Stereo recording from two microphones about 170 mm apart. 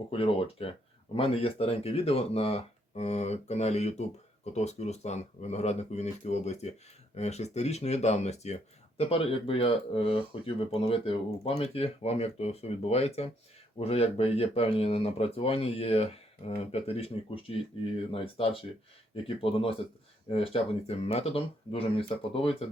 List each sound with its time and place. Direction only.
0.1 s speech: 35° left (ahead or behind)